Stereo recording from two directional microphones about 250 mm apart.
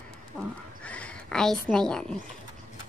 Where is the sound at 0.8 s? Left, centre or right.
Centre.